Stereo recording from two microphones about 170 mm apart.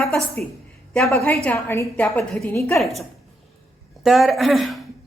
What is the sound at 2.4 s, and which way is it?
Speech, 15° left (ahead or behind).